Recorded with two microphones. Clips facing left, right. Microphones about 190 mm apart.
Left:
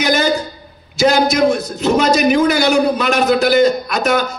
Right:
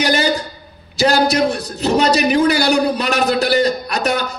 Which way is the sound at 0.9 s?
35° right (ahead or behind).